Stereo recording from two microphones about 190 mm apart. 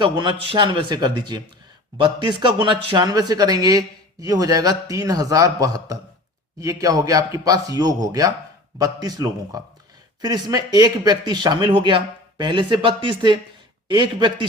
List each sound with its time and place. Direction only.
0.0 s a man's voice: 25° right (ahead or behind)